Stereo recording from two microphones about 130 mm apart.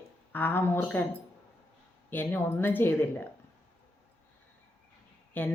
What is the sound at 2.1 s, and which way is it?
Speech, 15° left (ahead or behind).